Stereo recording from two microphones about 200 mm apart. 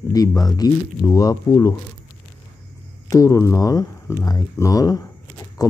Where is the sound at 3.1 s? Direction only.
15° left (ahead or behind).